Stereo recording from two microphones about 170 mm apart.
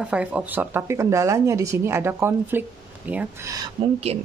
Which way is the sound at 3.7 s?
35° right (ahead or behind).